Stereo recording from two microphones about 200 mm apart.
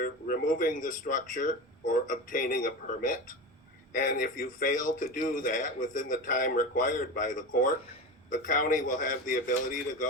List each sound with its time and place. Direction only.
0.0 s a man's voice: 45° left (ahead or behind)